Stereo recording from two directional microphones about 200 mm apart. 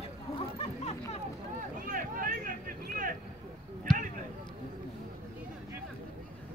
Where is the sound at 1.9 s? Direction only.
45° right (ahead or behind).